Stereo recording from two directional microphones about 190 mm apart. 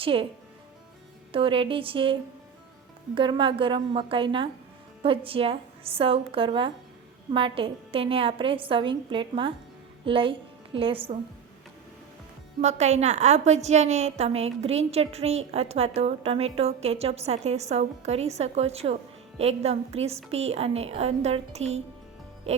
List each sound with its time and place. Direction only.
0.0 s a woman's voice: 30° right (ahead or behind)
1.3 s a woman's voice: 30° right (ahead or behind)
3.2 s a woman's voice: 25° right (ahead or behind)
12.6 s a woman's voice: 35° right (ahead or behind)